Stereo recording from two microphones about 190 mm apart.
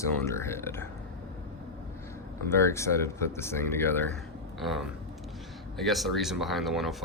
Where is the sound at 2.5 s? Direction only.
15° left (ahead or behind).